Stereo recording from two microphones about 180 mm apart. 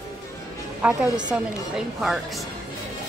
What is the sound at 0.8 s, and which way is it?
Speech, 5° right (ahead or behind).